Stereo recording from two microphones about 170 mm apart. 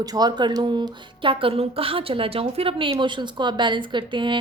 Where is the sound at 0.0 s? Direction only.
20° right (ahead or behind).